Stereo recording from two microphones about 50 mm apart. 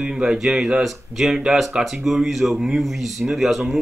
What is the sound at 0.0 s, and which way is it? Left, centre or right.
Speech, centre.